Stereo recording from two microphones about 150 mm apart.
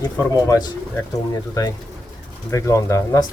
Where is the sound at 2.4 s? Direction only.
20° left (ahead or behind).